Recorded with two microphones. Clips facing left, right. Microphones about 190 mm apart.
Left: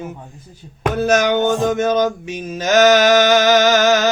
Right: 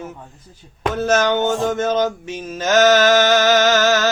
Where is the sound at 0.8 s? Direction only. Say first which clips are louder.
Left 2 dB; 10° left (ahead or behind).